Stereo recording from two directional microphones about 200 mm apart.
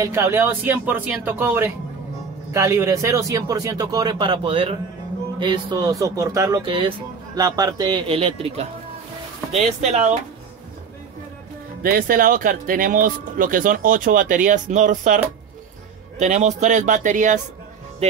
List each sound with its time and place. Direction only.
0.0 s speech: 15° right (ahead or behind); by 10.1 s 35° right (ahead or behind)
11.8 s speech: 45° right (ahead or behind)
16.2 s speech: 35° right (ahead or behind)